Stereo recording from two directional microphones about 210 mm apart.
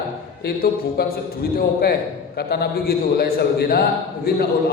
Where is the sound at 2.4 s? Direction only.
50° left (ahead or behind).